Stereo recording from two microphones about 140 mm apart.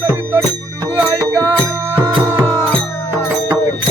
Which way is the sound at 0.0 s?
15° right (ahead or behind).